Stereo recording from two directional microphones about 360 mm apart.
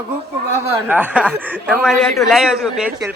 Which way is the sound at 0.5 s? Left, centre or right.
Centre.